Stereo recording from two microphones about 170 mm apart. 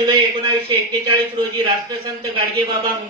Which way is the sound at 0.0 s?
30° right (ahead or behind).